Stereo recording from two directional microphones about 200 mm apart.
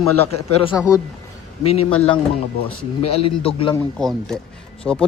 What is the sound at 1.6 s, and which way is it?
Speech, 30° left (ahead or behind).